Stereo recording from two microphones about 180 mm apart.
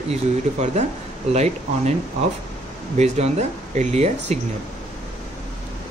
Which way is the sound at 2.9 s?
40° right (ahead or behind).